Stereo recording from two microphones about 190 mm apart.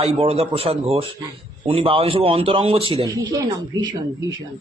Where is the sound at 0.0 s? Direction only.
30° right (ahead or behind).